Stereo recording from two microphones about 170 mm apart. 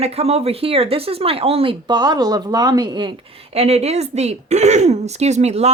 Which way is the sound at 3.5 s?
40° right (ahead or behind).